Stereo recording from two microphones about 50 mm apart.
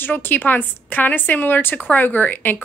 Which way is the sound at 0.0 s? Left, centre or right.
Left.